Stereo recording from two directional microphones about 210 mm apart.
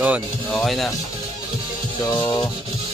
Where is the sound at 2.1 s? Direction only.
20° left (ahead or behind).